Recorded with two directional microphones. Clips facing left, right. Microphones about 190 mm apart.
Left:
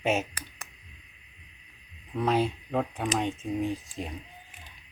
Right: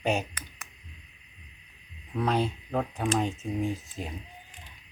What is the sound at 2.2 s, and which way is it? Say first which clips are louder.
Speech: left 1 dB; centre (ahead or behind).